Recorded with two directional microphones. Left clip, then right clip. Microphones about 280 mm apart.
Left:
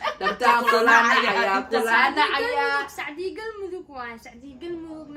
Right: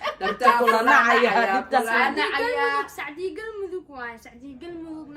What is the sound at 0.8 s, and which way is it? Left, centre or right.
Speech, right.